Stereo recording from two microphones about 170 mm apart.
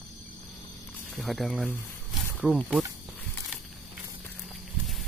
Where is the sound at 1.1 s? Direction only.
Centre (ahead or behind).